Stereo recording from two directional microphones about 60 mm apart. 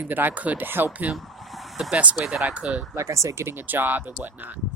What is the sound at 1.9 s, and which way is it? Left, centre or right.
Speech, right.